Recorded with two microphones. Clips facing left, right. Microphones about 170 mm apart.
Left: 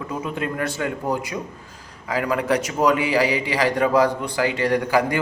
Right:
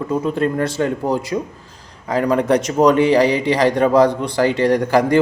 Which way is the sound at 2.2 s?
35° right (ahead or behind).